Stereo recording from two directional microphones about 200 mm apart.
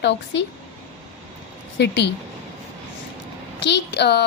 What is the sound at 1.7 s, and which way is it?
Speech, 60° left (ahead or behind).